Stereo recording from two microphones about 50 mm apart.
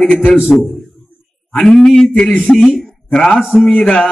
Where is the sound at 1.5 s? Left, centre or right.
Centre.